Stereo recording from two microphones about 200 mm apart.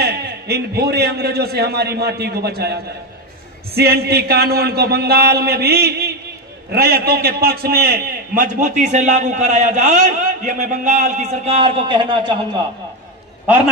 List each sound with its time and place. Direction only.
0.0 s a man's voice: 55° right (ahead or behind); by 12.4 s 25° right (ahead or behind)